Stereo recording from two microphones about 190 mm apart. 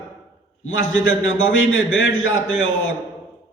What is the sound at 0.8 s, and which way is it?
A man's voice, 90° left.